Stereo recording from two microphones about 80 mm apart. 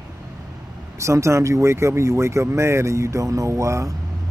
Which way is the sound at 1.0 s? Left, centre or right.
Right.